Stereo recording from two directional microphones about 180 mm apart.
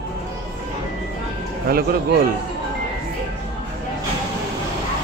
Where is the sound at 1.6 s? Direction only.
55° right (ahead or behind).